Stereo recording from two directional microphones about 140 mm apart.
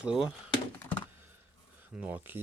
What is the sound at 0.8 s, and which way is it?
Computer keyboard, 15° left (ahead or behind).